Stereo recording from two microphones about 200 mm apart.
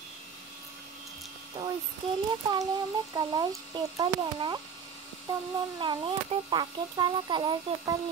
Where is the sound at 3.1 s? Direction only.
20° right (ahead or behind).